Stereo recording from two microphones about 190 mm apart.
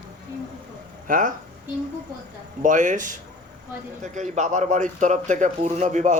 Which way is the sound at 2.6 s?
40° right (ahead or behind).